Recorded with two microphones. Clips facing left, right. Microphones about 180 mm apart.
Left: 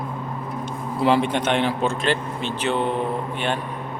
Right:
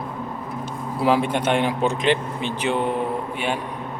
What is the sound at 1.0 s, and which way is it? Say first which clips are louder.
A man's voice: even; 10° right (ahead or behind).